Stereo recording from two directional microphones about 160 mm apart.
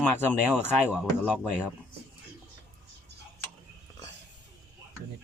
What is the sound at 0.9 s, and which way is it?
Speech, 5° right (ahead or behind).